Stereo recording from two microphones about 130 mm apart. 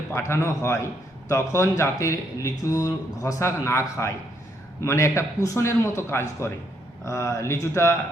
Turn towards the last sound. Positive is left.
turn(degrees=20)  # may be behind; listen again after turning